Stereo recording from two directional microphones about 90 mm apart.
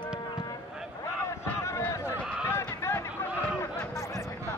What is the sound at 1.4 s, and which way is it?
Crowd, 30° left (ahead or behind).